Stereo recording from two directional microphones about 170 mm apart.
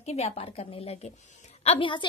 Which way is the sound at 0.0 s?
40° left (ahead or behind).